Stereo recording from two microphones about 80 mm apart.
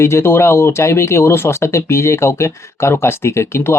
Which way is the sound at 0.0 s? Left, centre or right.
Left.